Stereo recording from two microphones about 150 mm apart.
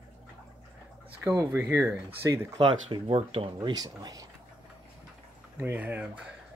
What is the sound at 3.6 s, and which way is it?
Speech, 25° right (ahead or behind).